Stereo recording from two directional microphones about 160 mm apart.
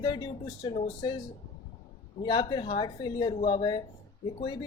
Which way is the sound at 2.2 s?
25° left (ahead or behind).